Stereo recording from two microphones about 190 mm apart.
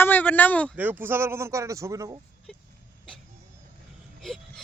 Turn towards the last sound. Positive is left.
turn(degrees=0)  # may be behind; listen again after turning